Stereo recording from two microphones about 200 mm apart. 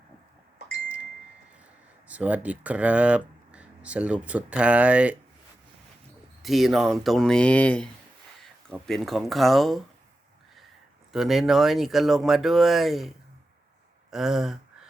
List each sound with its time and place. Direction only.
2.0 s speech: 5° right (ahead or behind)
6.4 s speech: centre (ahead or behind)
11.1 s speech: centre (ahead or behind)